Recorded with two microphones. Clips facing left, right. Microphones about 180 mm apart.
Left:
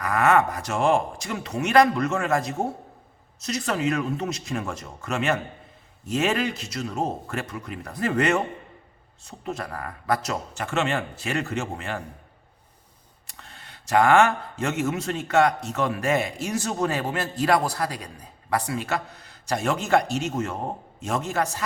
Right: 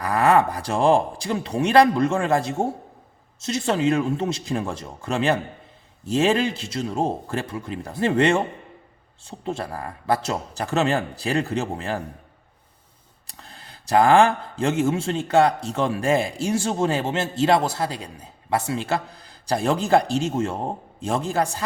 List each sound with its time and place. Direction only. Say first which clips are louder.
0.0 s a man's voice: right 2 dB; 30° right (ahead or behind)
13.2 s speech: right 2 dB; 35° right (ahead or behind)